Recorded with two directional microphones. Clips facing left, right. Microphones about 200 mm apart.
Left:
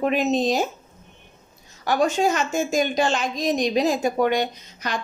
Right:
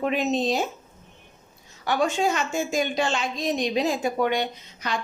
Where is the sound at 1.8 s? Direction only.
40° left (ahead or behind).